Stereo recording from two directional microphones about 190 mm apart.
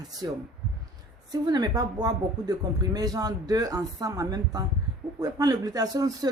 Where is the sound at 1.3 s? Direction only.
20° right (ahead or behind).